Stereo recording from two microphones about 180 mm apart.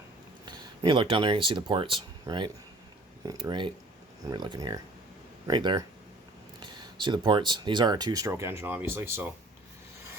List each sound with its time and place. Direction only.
0.4 s speech: 25° right (ahead or behind)